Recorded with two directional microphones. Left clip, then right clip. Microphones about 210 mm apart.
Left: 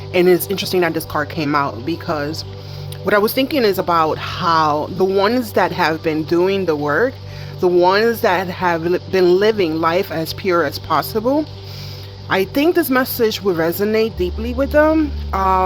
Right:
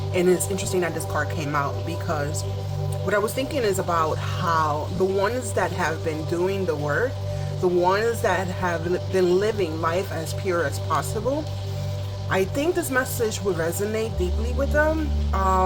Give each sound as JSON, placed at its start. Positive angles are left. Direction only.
{"t": 0.1, "sound": "speech", "side_deg": 50}